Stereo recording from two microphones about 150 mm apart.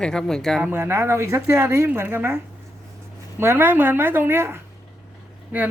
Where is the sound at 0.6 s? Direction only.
15° right (ahead or behind).